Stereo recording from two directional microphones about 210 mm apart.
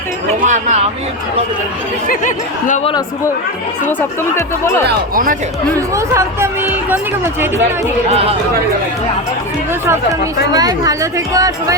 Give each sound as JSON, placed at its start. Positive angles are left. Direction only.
{"t": 0.4, "sound": "speech", "side_deg": -35}
{"t": 2.0, "sound": "speech", "side_deg": 40}
{"t": 4.4, "sound": "speech", "side_deg": 15}
{"t": 4.9, "sound": "speech", "side_deg": -40}
{"t": 5.9, "sound": "speech", "side_deg": -15}
{"t": 8.1, "sound": "speech", "side_deg": -30}
{"t": 9.8, "sound": "speech", "side_deg": -15}